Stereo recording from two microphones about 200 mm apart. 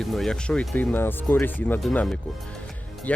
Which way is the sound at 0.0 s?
Centre (ahead or behind).